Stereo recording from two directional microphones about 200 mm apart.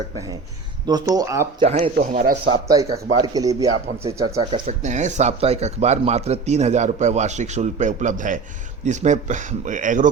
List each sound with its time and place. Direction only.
0.9 s speech: 20° right (ahead or behind)
1.6 s speech: 30° right (ahead or behind)
2.5 s speech: 20° right (ahead or behind)
4.5 s speech: 35° right (ahead or behind)